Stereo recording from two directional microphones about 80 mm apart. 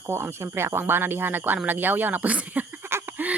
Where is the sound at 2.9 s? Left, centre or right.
Right.